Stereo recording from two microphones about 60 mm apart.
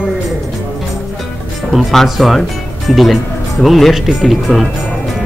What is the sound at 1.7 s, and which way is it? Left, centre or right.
Speech, centre.